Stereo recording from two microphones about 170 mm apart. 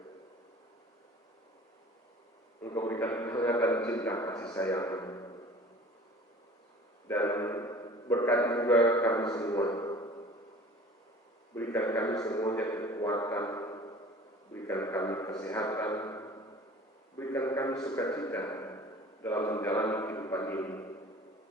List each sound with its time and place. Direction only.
2.6 s a man's voice: 20° left (ahead or behind)
7.1 s a man's voice: 15° left (ahead or behind)
11.5 s a man's voice: 15° left (ahead or behind)
16.0 s a sound: 20° left (ahead or behind)
17.2 s a man's voice: 15° left (ahead or behind)